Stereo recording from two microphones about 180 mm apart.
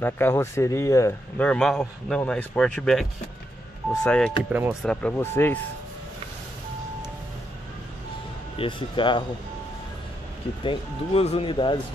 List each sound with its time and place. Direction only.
0.0 s a man's voice: 10° left (ahead or behind)
4.5 s speech: 10° right (ahead or behind)
4.8 s a man's voice: 5° left (ahead or behind)
8.5 s speech: 25° left (ahead or behind)
10.6 s speech: 30° left (ahead or behind)